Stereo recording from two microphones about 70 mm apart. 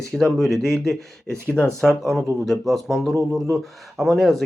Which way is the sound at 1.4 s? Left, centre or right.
Left.